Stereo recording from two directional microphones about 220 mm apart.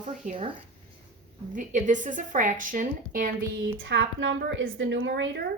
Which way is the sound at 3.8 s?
60° right (ahead or behind).